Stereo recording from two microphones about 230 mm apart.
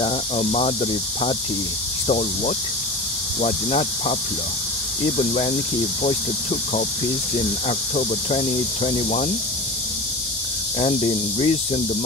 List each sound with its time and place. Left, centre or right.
0.0 s speech: left
7.6 s speech: left
10.8 s speech: left